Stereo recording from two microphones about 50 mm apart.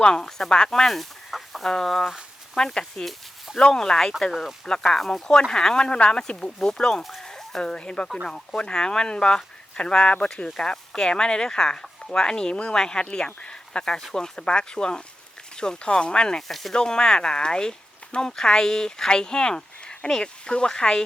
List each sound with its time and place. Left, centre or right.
0.0 s speech: centre
16.5 s speech: centre
16.7 s speech: centre